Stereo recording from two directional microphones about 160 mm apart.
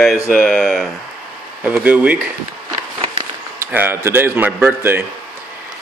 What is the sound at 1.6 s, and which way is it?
Speech, 10° right (ahead or behind).